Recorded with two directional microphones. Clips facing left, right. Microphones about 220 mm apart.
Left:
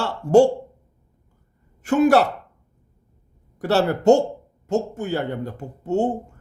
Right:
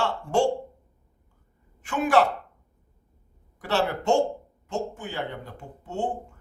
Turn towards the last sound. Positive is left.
turn(degrees=40)  # may be behind; listen again after turning